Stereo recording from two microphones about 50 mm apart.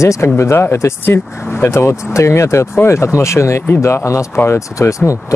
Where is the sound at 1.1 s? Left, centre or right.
Left.